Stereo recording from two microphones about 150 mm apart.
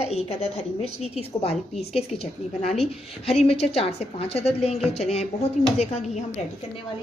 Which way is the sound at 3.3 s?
40° left (ahead or behind).